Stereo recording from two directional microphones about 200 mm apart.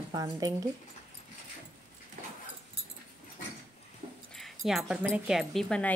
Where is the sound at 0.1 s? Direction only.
20° right (ahead or behind).